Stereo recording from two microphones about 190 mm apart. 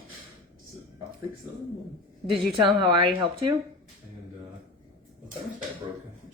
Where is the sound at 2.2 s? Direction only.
25° right (ahead or behind).